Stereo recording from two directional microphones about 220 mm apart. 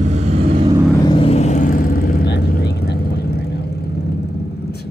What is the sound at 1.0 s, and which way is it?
Vehicle, 25° left (ahead or behind).